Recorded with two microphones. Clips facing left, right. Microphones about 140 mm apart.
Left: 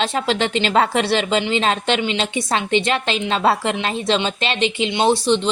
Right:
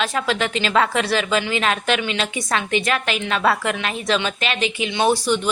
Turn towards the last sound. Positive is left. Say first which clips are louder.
# left 2 dB
turn(degrees=25)  # may be behind; listen again after turning